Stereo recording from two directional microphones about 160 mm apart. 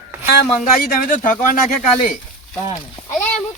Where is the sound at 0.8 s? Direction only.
60° left (ahead or behind).